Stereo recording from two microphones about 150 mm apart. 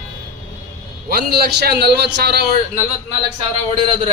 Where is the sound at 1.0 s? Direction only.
90° right.